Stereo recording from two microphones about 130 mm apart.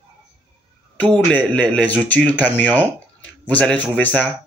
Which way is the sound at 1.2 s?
10° left (ahead or behind).